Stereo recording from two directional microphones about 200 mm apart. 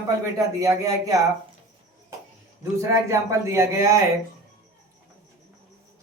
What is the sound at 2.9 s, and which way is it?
Speech, 15° right (ahead or behind).